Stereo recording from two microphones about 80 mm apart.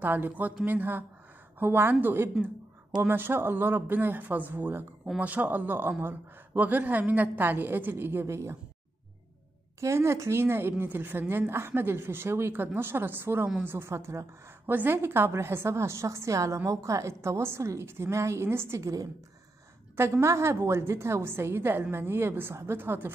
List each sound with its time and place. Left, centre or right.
0.0 s speech: right
9.8 s a woman's voice: right